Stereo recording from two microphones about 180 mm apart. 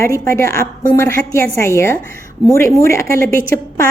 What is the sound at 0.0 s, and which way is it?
A woman's voice, 15° left (ahead or behind).